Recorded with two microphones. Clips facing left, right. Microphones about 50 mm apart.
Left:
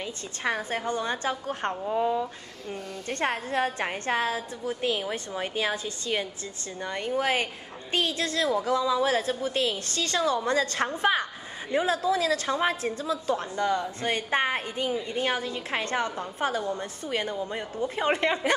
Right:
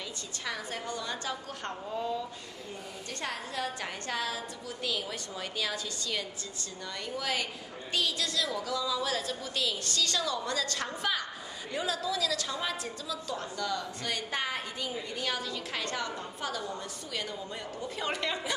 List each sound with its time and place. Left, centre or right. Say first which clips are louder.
0.4 s a woman's voice: left 8 dB; left